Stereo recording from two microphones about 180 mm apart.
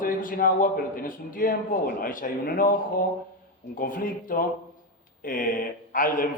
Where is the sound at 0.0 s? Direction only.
50° left (ahead or behind).